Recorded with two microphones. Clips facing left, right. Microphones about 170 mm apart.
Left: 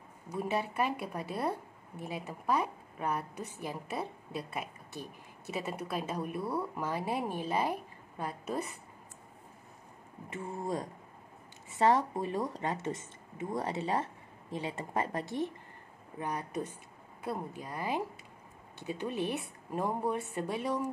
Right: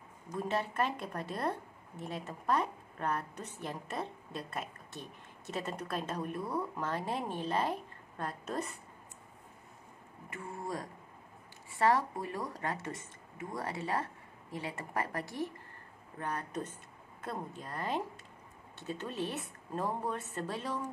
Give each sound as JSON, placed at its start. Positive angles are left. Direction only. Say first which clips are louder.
{"t": 0.3, "sound": "speech", "louder": "left 1 dB", "side_deg": 10}
{"t": 10.3, "sound": "speech", "louder": "left 4 dB", "side_deg": 20}